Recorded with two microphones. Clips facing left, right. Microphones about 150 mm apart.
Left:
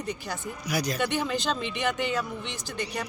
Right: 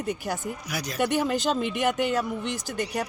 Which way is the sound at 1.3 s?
45° right (ahead or behind).